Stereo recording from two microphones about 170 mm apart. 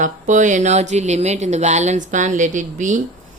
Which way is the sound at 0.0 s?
45° right (ahead or behind).